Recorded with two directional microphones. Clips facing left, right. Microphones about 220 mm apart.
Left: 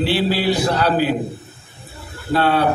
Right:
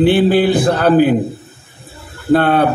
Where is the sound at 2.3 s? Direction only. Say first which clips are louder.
Right 5 dB; 50° right (ahead or behind).